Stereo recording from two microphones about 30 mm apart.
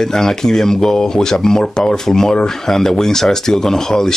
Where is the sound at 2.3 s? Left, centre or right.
Left.